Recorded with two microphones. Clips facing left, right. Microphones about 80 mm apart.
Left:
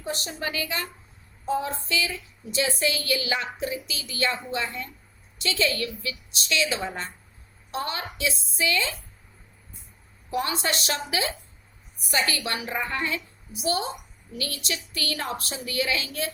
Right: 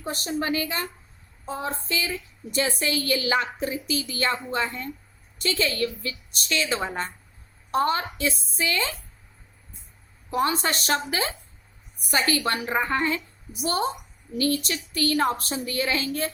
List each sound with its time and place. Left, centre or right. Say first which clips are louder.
0.0 s a woman's voice: right 3 dB; right
10.3 s a woman's voice: right 3 dB; right